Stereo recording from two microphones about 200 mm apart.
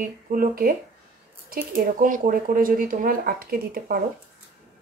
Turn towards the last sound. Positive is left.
turn(degrees=-45)  # may be behind; listen again after turning